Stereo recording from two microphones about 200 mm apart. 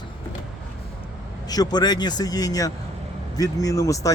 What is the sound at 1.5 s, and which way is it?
Speech, 20° left (ahead or behind).